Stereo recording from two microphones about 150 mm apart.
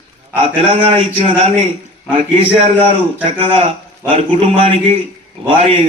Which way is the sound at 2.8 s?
35° right (ahead or behind).